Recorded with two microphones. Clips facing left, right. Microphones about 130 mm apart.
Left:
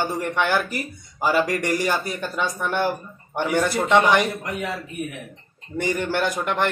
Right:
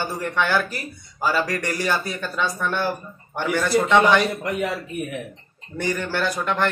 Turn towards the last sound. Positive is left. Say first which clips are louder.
# even
turn(degrees=15)  # may be behind; listen again after turning